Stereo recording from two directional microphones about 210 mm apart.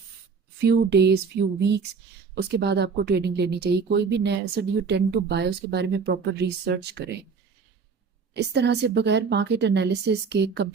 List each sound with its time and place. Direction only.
0.6 s speech: 55° right (ahead or behind)
8.4 s speech: 55° right (ahead or behind)